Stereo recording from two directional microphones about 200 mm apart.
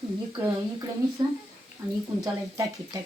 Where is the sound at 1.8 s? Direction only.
15° right (ahead or behind).